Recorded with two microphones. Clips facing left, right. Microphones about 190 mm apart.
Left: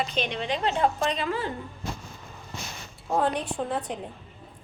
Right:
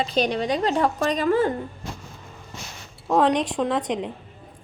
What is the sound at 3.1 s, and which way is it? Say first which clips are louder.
A woman's voice: right 6 dB; 90° right.